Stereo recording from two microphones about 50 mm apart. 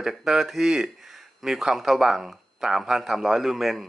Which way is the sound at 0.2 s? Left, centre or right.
Centre.